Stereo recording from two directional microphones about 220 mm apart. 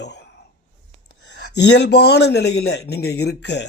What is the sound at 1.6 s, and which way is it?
Speech, 50° left (ahead or behind).